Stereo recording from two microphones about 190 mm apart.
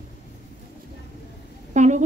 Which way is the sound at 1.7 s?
40° right (ahead or behind).